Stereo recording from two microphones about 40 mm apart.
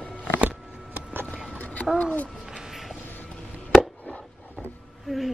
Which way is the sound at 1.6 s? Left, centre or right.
Left.